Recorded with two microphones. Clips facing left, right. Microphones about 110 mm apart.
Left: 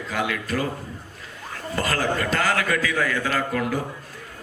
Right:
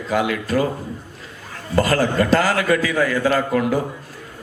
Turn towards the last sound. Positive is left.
turn(degrees=-30)  # may be behind; listen again after turning